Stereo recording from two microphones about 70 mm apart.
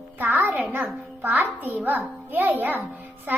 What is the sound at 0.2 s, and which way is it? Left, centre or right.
A child's voice, right.